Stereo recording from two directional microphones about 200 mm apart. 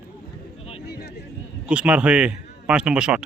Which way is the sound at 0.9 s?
50° left (ahead or behind).